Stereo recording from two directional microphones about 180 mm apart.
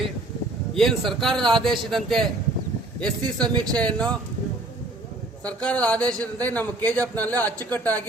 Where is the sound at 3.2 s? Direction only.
25° right (ahead or behind).